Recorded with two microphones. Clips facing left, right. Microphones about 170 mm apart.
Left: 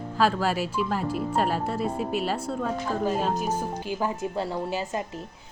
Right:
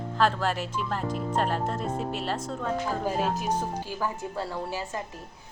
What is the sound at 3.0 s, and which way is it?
Speech, 5° right (ahead or behind).